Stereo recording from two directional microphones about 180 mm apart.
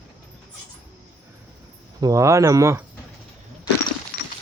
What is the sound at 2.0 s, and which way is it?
Speech, 20° right (ahead or behind).